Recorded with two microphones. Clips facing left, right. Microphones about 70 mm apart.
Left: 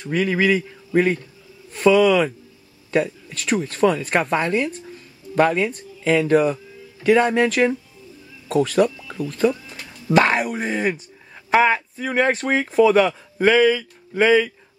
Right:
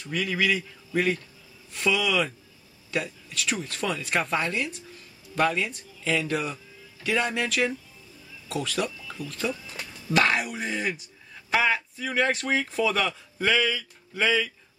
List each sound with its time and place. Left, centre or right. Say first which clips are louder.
0.0 s a man's voice: left 7 dB; left